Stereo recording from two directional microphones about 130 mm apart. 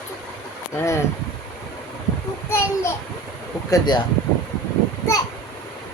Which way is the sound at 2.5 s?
20° left (ahead or behind).